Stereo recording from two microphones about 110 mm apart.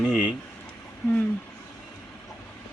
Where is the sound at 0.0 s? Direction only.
5° right (ahead or behind).